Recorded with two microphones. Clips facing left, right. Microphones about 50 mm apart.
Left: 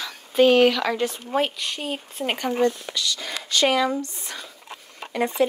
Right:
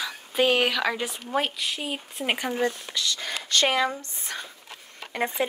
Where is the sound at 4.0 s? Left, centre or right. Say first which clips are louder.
Left 2 dB; right.